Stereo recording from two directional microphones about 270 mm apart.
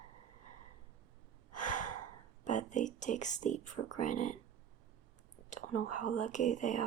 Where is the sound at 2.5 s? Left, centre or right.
Left.